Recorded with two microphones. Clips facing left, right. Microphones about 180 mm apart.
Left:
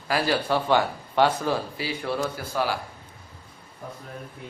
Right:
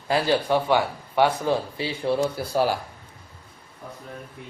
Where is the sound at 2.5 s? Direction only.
40° right (ahead or behind).